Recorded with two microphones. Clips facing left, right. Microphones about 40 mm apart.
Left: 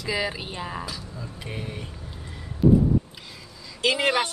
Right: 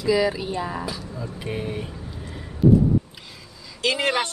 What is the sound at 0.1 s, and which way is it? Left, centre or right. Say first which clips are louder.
Speech: right 7 dB; left.